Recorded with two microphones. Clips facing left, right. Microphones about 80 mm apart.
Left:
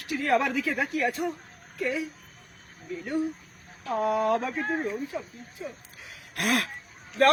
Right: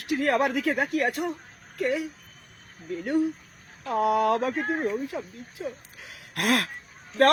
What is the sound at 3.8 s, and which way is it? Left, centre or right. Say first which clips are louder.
Speech: right 3 dB; right.